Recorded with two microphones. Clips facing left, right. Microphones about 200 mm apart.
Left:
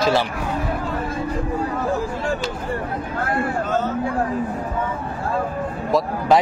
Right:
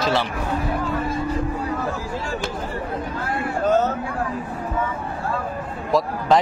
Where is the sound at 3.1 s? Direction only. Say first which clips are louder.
Left 7 dB; 55° left (ahead or behind).